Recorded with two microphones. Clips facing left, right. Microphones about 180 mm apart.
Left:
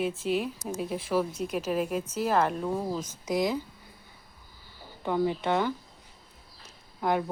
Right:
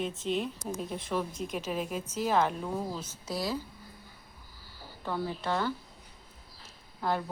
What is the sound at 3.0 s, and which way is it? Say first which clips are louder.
Speech: left 6 dB; 20° left (ahead or behind).